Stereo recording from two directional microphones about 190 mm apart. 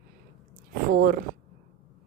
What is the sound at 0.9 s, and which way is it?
Speech, 50° right (ahead or behind).